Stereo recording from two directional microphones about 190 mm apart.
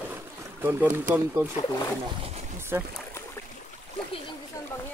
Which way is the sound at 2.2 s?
35° right (ahead or behind).